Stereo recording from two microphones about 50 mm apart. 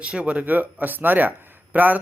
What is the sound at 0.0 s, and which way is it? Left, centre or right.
Speech, right.